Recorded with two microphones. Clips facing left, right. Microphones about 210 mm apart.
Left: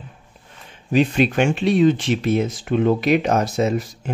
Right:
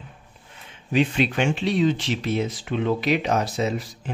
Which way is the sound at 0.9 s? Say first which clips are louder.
Left 4 dB; 45° left (ahead or behind).